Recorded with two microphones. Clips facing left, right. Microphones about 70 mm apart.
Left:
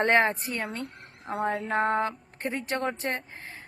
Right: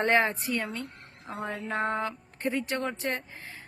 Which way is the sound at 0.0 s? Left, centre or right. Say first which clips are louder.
Left 2 dB; left.